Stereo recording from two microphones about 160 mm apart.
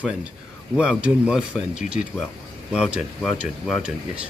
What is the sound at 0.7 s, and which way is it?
A man's voice, 5° right (ahead or behind).